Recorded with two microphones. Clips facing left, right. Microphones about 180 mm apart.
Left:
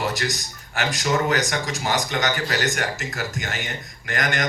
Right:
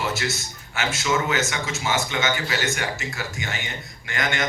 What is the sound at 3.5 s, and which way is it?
Speech, centre (ahead or behind).